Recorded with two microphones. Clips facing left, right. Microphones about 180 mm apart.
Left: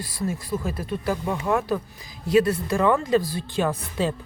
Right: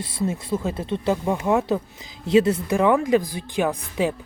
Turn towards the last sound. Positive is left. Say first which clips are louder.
# right 2 dB
turn(degrees=-15)  # may be behind; listen again after turning